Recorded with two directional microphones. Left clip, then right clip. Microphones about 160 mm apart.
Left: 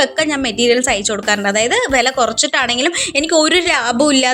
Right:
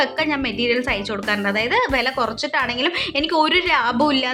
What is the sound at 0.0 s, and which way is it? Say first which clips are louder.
A woman's voice: left 5 dB; 25° left (ahead or behind).